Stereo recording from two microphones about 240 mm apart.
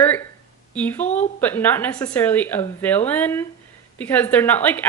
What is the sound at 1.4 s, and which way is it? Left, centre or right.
Speech, centre.